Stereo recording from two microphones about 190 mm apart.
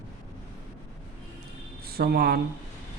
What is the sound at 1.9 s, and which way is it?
Speech, 55° right (ahead or behind).